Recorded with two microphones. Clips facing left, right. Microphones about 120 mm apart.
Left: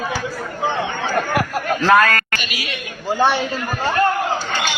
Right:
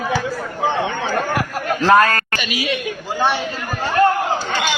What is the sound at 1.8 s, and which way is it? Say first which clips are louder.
Speech: right 1 dB; 30° right (ahead or behind).